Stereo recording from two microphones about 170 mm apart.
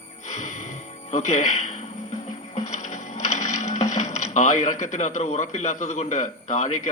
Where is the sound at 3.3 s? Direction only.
45° left (ahead or behind).